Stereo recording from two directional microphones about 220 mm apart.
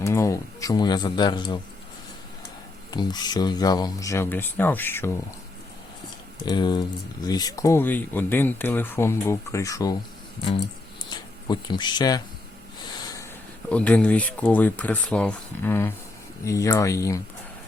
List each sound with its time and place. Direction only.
0.0 s speech: 15° left (ahead or behind)
2.9 s speech: 20° left (ahead or behind)
6.4 s speech: 20° left (ahead or behind)
11.1 s speech: 20° left (ahead or behind)
13.0 s a sound: 15° left (ahead or behind)
13.7 s speech: 5° left (ahead or behind)